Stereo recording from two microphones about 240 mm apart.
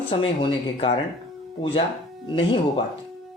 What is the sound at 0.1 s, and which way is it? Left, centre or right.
Speech, left.